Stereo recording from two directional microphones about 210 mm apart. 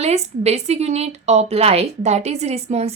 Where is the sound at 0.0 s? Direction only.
30° right (ahead or behind).